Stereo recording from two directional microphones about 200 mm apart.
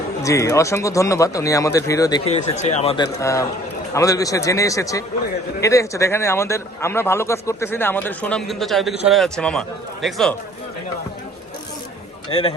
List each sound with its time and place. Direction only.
0.2 s a man's voice: 15° left (ahead or behind)
2.2 s a man's voice: 30° left (ahead or behind); by 10.3 s centre (ahead or behind)
12.3 s speech: 25° left (ahead or behind)